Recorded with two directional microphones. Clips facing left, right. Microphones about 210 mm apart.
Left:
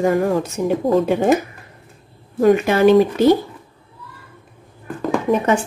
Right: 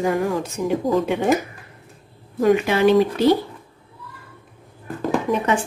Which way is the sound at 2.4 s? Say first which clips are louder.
Left 3 dB; 45° left (ahead or behind).